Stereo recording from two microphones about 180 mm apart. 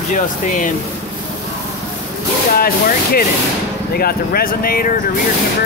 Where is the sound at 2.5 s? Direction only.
55° left (ahead or behind).